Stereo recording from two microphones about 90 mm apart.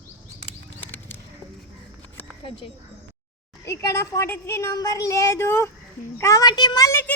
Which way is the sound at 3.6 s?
35° left (ahead or behind).